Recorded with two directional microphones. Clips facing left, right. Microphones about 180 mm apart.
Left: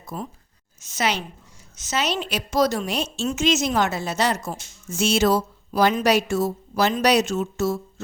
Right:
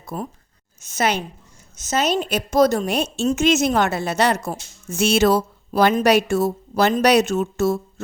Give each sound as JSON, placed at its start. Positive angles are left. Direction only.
{"t": 0.0, "sound": "a woman's voice", "side_deg": -55}